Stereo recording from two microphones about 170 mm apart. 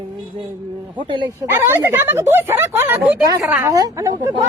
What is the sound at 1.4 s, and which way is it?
A woman's voice, 15° right (ahead or behind).